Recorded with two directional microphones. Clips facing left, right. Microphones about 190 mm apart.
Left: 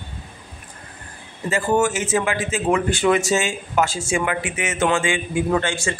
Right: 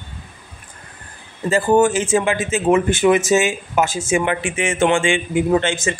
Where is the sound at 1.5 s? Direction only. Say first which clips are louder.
Right 5 dB; 30° right (ahead or behind).